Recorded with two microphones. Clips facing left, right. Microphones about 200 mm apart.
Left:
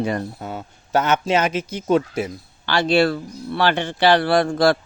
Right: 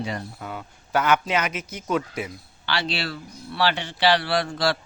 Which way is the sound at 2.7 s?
50° left (ahead or behind).